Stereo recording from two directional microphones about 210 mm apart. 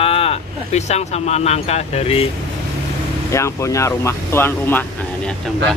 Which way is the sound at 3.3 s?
15° left (ahead or behind).